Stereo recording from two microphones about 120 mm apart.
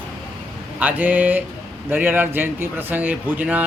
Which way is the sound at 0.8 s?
15° right (ahead or behind).